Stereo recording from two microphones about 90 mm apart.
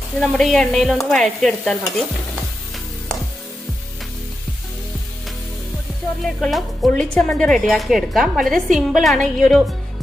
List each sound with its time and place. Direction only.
0.2 s a woman's voice: 5° left (ahead or behind)
6.2 s a woman's voice: centre (ahead or behind)